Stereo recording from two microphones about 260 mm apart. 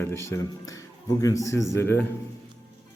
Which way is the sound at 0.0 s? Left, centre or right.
Centre.